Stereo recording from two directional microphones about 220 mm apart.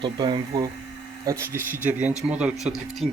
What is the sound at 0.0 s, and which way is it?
Speech, 20° right (ahead or behind).